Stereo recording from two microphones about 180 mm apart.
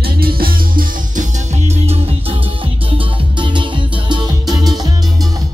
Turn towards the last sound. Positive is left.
turn(degrees=-20)  # may be behind; listen again after turning